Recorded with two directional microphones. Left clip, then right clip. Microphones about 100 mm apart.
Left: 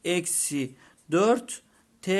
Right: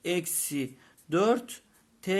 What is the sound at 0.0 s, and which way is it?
Speech, 30° left (ahead or behind).